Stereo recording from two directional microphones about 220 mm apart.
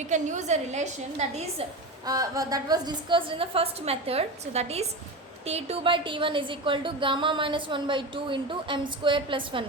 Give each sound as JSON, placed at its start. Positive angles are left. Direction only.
{"t": 0.0, "sound": "a woman's voice", "side_deg": -35}
{"t": 2.0, "sound": "a woman's voice", "side_deg": -15}